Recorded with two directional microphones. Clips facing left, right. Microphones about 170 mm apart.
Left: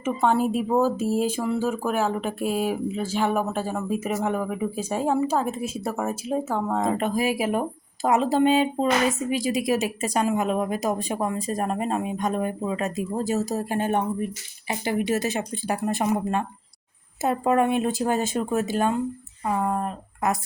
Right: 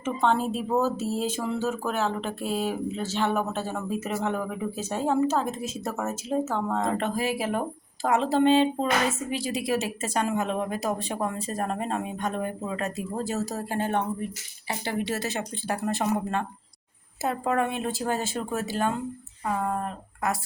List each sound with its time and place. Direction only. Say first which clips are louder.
0.0 s speech: left 3 dB; 5° left (ahead or behind)